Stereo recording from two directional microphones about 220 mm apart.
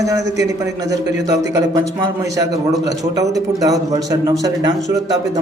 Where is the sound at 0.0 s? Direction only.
15° right (ahead or behind).